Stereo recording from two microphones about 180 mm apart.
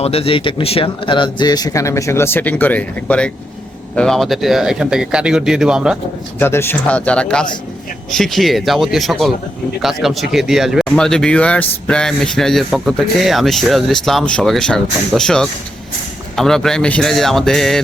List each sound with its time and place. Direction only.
0.0 s speech: 35° left (ahead or behind); by 6.0 s 5° right (ahead or behind)
6.4 s speech: 15° left (ahead or behind)